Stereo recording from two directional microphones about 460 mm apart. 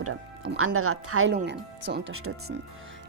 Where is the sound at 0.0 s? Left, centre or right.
Right.